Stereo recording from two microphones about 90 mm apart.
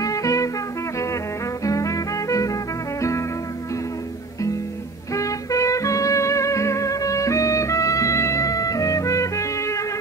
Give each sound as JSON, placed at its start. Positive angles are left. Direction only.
{"t": 0.0, "sound": "music", "side_deg": 40}
{"t": 1.6, "sound": "music", "side_deg": 40}
{"t": 5.1, "sound": "music", "side_deg": 35}